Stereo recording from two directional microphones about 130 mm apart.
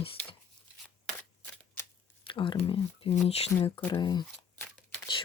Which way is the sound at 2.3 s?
40° left (ahead or behind).